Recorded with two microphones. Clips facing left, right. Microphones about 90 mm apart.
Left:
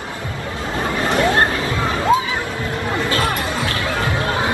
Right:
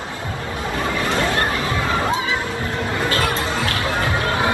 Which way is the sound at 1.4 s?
35° left (ahead or behind).